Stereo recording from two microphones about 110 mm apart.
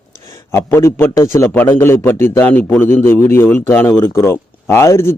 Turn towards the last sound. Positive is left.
turn(degrees=25)  # may be behind; listen again after turning